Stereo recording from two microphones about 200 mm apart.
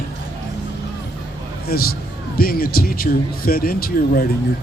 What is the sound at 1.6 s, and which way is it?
A man's voice, 50° left (ahead or behind).